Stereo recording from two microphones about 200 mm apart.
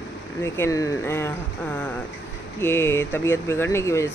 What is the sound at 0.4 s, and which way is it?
Speech, 15° left (ahead or behind).